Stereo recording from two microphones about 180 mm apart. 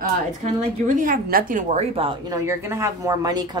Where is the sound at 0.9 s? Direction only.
50° right (ahead or behind); by 2.2 s 30° right (ahead or behind).